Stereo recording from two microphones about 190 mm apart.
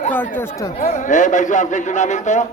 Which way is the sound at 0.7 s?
40° left (ahead or behind).